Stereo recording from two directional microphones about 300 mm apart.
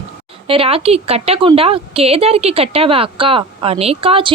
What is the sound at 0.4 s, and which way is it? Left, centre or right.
A woman's voice, centre.